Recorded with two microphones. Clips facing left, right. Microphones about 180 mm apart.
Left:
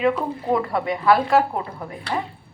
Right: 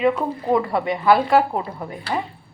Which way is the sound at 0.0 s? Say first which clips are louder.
Right 1 dB; 5° right (ahead or behind).